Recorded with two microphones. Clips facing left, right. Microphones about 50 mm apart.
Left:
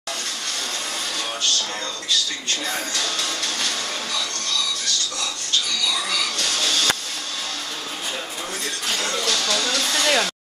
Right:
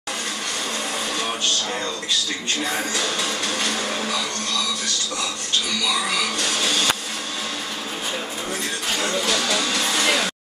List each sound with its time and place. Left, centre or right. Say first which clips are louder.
2.6 s speech: right 4 dB; centre
6.0 s music: right 2 dB; centre
9.0 s speech: right 2 dB; centre